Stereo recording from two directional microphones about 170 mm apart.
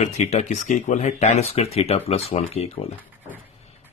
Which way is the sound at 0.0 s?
40° left (ahead or behind).